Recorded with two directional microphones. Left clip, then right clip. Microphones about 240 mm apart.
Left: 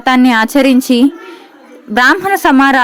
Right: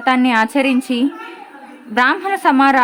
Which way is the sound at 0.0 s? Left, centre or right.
Left.